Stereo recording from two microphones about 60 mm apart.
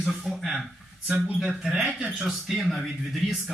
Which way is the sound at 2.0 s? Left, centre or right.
Centre.